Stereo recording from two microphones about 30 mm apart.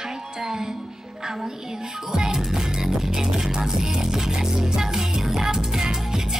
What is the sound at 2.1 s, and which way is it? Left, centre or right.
Music, right.